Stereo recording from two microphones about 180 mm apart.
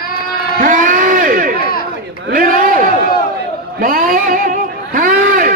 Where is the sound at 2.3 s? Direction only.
50° right (ahead or behind).